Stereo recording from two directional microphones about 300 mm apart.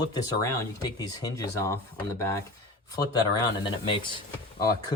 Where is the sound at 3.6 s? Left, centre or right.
Centre.